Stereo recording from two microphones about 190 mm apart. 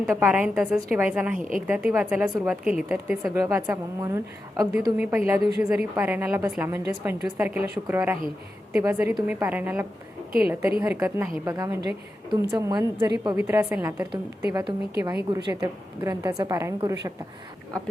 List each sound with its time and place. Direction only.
0.1 s a woman's voice: 10° right (ahead or behind)
1.4 s a woman's voice: 45° right (ahead or behind)
1.6 s a woman's voice: 10° right (ahead or behind)